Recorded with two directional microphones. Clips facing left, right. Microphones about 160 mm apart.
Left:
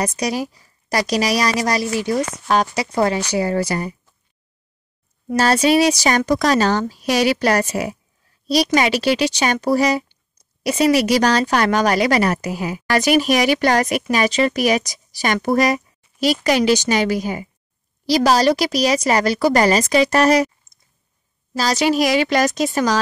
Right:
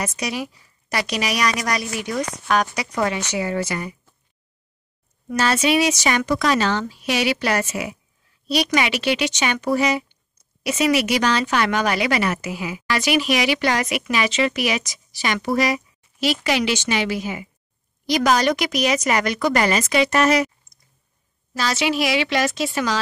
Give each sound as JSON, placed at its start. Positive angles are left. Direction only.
{"t": 0.0, "sound": "a woman's voice", "side_deg": 40}
{"t": 5.3, "sound": "a woman's voice", "side_deg": 35}
{"t": 20.7, "sound": "clicking", "side_deg": 0}
{"t": 21.5, "sound": "a woman's voice", "side_deg": 40}